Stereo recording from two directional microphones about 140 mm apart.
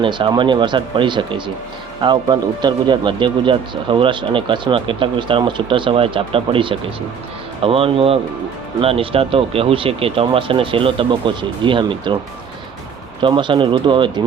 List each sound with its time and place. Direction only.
0.0 s a man's voice: 35° right (ahead or behind)
13.2 s a man's voice: 35° right (ahead or behind)